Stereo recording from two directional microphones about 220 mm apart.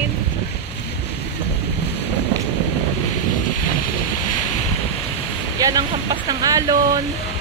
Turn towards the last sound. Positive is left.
turn(degrees=-15)  # may be behind; listen again after turning